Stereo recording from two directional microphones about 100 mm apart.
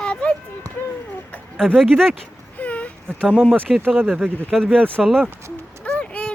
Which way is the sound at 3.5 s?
15° right (ahead or behind).